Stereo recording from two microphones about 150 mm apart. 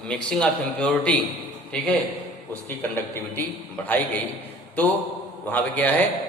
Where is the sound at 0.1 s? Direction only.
5° left (ahead or behind).